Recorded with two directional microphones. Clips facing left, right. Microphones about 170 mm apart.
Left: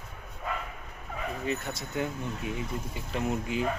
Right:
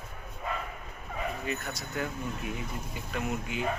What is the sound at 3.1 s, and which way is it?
Speech, 30° left (ahead or behind).